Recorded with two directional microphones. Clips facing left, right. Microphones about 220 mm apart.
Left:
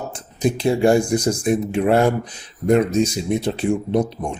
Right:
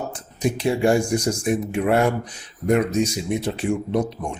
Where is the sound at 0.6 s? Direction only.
35° left (ahead or behind).